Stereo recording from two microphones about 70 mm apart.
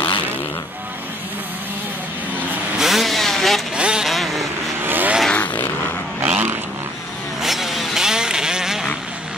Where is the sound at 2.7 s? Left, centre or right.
Centre.